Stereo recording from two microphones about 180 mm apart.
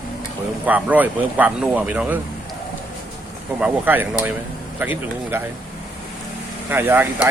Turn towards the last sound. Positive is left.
turn(degrees=-10)  # may be behind; listen again after turning